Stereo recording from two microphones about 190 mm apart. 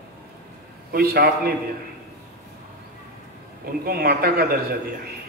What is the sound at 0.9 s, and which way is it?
Speech, 50° right (ahead or behind).